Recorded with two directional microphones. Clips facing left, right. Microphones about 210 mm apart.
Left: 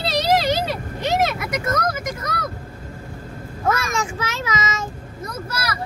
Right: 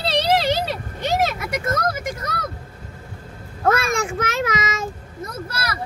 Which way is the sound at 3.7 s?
60° right (ahead or behind).